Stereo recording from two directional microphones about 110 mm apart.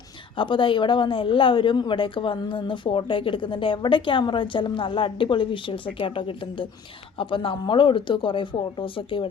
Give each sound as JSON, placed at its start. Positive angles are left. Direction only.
{"t": 0.3, "sound": "speech", "side_deg": 50}